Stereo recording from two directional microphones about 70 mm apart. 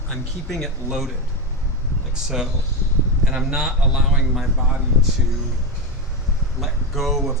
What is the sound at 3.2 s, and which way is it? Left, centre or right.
A man's voice, centre.